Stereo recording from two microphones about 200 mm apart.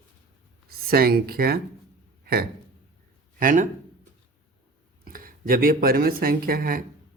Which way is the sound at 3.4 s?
40° right (ahead or behind).